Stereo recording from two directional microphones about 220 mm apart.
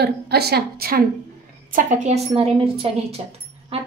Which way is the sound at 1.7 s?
35° right (ahead or behind).